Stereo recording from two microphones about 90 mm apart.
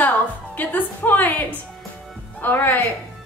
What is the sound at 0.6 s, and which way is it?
A woman's voice, 20° left (ahead or behind).